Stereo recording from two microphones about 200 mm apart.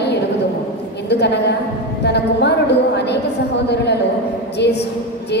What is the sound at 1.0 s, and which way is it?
A woman's voice, 55° left (ahead or behind).